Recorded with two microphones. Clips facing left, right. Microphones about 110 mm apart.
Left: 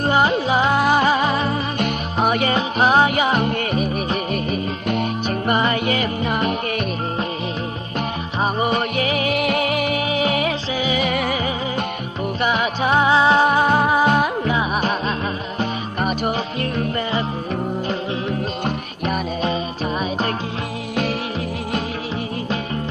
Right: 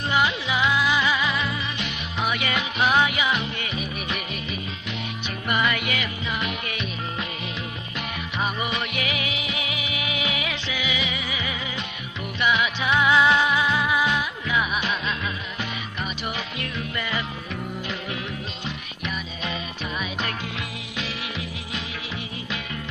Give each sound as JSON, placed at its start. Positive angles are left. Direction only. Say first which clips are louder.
{"t": 0.0, "sound": "music", "louder": "left 6 dB", "side_deg": 40}
{"t": 8.4, "sound": "music", "louder": "left 8 dB", "side_deg": 40}
{"t": 18.6, "sound": "music", "louder": "left 9 dB", "side_deg": 45}